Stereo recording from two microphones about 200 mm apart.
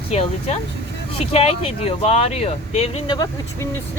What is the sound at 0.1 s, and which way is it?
Speech, 30° left (ahead or behind).